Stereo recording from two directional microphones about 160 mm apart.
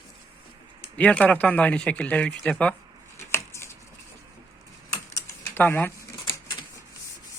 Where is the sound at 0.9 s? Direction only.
10° left (ahead or behind).